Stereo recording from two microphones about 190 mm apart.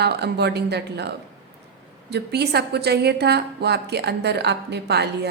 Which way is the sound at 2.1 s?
60° right (ahead or behind).